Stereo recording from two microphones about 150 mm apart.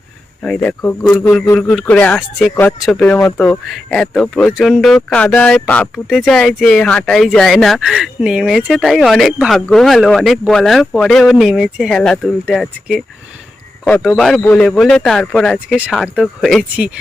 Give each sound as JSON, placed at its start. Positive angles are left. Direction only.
{"t": 0.4, "sound": "speech", "side_deg": 5}
{"t": 1.5, "sound": "speech", "side_deg": 5}
{"t": 14.1, "sound": "speech", "side_deg": 0}